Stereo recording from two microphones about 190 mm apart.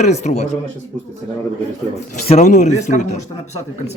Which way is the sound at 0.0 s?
35° left (ahead or behind).